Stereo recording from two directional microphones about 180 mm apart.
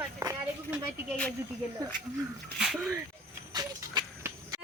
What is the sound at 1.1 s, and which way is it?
Speech, 5° left (ahead or behind).